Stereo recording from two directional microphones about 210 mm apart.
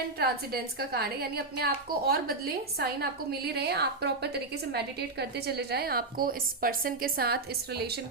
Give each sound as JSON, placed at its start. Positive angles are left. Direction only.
{"t": 0.2, "sound": "a woman's voice", "side_deg": -50}